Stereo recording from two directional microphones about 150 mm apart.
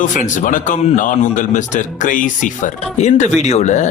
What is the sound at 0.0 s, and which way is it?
A man's voice, 60° left (ahead or behind).